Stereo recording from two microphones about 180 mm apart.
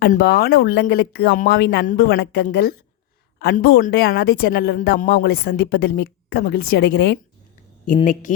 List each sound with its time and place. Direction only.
0.2 s a woman's voice: 60° left (ahead or behind)
8.0 s speech: 45° left (ahead or behind)